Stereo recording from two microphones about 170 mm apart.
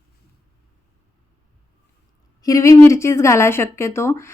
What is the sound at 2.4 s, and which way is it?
Speech, 20° left (ahead or behind).